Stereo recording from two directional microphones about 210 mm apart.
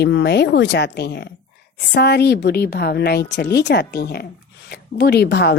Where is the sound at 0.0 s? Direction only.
55° left (ahead or behind).